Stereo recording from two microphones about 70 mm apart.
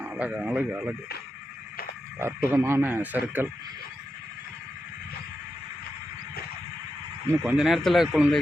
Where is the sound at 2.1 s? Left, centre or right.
Right.